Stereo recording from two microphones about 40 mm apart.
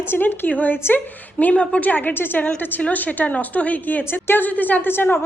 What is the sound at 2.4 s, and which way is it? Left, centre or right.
A woman's voice, left.